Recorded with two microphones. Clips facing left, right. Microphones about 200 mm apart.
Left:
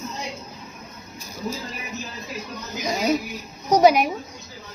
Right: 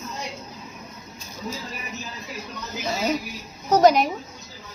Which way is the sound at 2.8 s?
15° left (ahead or behind).